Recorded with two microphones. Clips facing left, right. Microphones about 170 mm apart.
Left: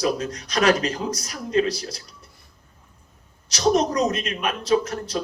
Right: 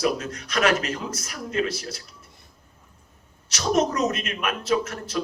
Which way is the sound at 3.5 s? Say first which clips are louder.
Left 3 dB; 35° left (ahead or behind).